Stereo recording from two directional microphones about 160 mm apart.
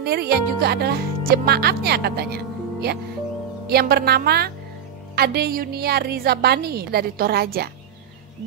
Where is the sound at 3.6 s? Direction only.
75° right (ahead or behind).